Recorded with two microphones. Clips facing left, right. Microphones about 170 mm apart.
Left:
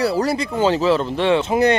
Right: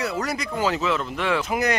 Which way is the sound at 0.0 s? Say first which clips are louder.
Left 8 dB; 30° left (ahead or behind).